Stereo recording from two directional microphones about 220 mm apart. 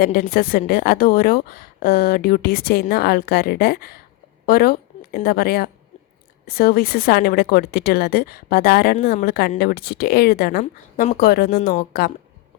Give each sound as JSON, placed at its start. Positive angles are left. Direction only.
{"t": 0.0, "sound": "a woman's voice", "side_deg": 40}